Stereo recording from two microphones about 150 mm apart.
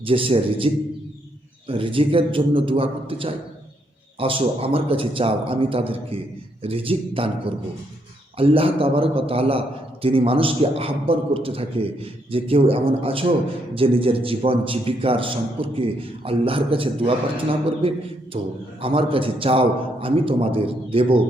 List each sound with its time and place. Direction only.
0.0 s a man's voice: 40° right (ahead or behind)